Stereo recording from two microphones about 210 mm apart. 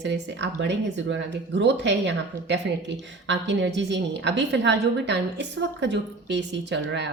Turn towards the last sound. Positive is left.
turn(degrees=-60)  # may be behind; listen again after turning